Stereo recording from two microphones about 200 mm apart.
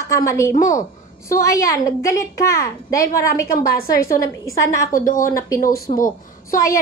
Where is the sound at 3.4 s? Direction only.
50° left (ahead or behind).